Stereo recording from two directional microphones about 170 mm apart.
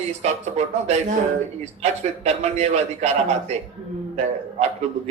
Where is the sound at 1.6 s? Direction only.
40° right (ahead or behind).